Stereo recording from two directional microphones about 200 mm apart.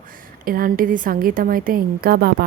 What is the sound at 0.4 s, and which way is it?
A woman's voice, 45° right (ahead or behind).